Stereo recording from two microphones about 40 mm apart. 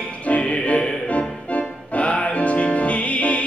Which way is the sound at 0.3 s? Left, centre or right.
Left.